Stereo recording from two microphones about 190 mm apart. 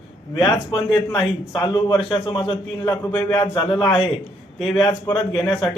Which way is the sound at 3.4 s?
25° left (ahead or behind).